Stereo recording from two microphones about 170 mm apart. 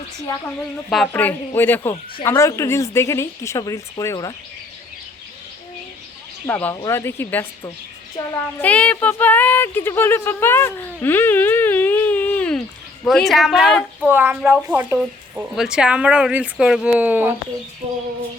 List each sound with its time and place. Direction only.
0.9 s a woman's voice: centre (ahead or behind)
1.1 s speech: 10° left (ahead or behind)
6.5 s speech: 10° left (ahead or behind)
8.6 s a woman's voice: 10° left (ahead or behind); by 17.3 s 10° right (ahead or behind)